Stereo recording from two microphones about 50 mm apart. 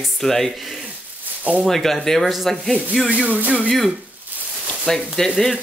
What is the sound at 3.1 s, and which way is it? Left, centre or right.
Speech, right.